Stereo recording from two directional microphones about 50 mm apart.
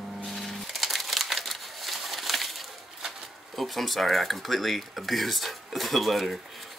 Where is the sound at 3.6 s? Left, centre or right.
Centre.